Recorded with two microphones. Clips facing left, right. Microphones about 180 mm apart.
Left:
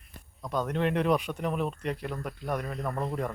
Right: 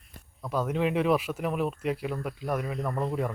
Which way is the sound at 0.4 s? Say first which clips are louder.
Right 1 dB; 5° right (ahead or behind).